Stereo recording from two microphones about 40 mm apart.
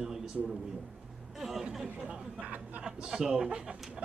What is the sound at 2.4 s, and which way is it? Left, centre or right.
Speech, right.